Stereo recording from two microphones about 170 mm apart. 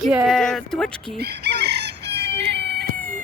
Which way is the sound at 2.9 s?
50° right (ahead or behind).